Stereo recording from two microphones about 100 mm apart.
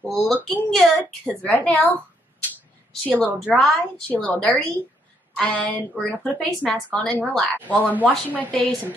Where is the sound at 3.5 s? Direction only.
5° left (ahead or behind).